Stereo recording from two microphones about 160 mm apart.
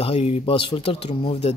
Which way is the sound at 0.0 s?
40° left (ahead or behind).